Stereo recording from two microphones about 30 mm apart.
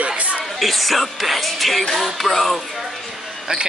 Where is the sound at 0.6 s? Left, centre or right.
Centre.